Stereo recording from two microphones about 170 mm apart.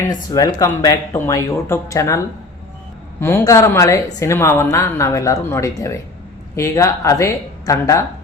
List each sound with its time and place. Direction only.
0.3 s a woman's voice: 20° left (ahead or behind)